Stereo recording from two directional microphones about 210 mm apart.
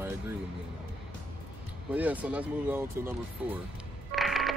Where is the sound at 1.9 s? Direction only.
5° right (ahead or behind).